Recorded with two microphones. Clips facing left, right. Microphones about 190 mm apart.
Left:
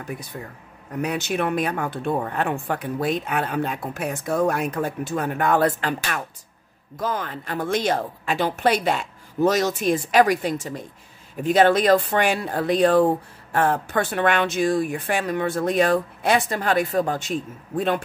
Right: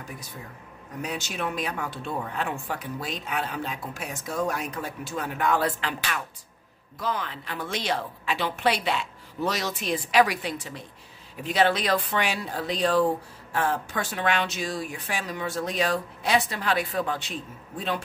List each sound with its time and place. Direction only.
1.0 s speech: 60° left (ahead or behind)